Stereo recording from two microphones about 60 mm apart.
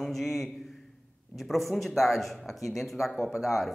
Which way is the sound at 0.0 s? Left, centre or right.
Centre.